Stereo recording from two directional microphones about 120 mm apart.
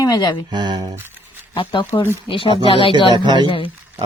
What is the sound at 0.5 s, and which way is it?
Speech, 40° right (ahead or behind).